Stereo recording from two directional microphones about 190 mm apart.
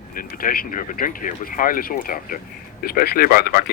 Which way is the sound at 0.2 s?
50° left (ahead or behind).